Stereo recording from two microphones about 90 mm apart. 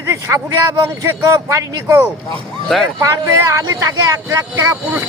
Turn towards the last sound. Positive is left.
turn(degrees=-30)  # may be behind; listen again after turning